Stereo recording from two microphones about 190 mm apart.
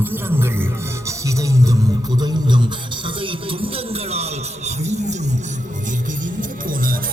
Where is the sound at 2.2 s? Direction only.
25° right (ahead or behind).